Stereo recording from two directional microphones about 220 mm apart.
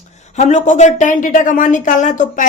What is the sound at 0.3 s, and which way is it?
Speech, 30° left (ahead or behind).